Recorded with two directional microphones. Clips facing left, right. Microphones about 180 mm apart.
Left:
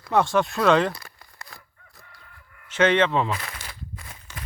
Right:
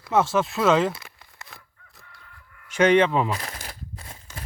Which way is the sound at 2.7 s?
10° right (ahead or behind).